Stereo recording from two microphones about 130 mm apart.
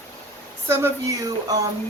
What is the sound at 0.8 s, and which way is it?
Speech, 25° right (ahead or behind).